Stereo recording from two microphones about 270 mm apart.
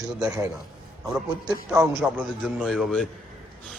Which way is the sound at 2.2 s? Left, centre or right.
Centre.